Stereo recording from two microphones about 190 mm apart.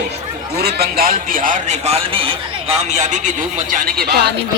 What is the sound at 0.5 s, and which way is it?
Speech, 55° right (ahead or behind).